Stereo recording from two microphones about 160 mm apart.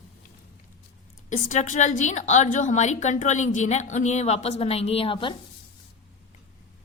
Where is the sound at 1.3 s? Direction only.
50° left (ahead or behind); by 5.4 s 35° left (ahead or behind).